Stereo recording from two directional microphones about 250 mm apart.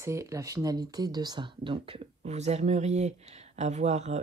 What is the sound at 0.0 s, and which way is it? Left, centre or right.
Speech, centre.